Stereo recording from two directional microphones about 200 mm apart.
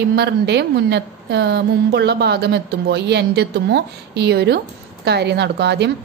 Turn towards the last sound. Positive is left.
turn(degrees=-55)  # may be behind; listen again after turning